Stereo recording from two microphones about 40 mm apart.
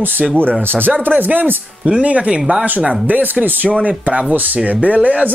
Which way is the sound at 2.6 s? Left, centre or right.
Right.